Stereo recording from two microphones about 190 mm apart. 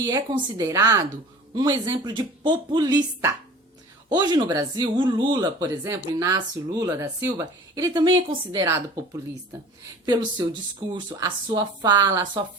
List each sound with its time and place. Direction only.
0.0 s speech: 20° right (ahead or behind)
10.1 s speech: 25° right (ahead or behind)